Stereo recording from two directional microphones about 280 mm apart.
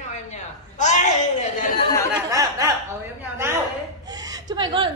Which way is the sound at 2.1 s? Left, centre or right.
Centre.